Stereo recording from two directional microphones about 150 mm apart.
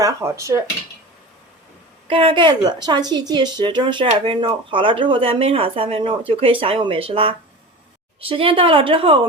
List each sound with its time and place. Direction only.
0.0 s cutlery: 20° right (ahead or behind)
2.0 s speech: 35° right (ahead or behind)